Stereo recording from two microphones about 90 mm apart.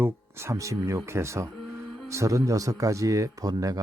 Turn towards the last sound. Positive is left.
turn(degrees=-40)  # may be behind; listen again after turning